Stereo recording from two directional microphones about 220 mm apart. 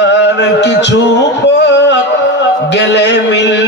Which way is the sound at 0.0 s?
50° left (ahead or behind).